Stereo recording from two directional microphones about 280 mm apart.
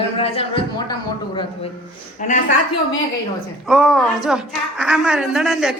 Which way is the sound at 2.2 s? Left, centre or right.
Left.